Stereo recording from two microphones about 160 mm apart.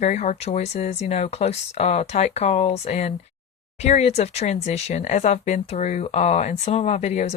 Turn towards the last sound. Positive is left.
turn(degrees=45)  # may be behind; listen again after turning